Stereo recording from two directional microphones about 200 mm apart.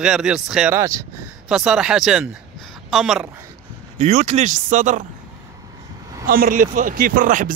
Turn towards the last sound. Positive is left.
turn(degrees=-40)  # may be behind; listen again after turning